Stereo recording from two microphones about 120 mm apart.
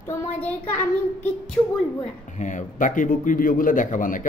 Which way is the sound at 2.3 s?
90° left.